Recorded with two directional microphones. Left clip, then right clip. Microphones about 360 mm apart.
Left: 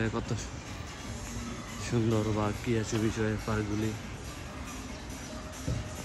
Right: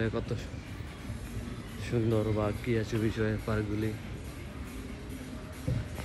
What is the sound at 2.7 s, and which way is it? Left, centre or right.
Speech, centre.